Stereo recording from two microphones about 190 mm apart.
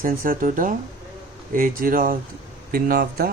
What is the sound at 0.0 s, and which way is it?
Speech, 45° right (ahead or behind).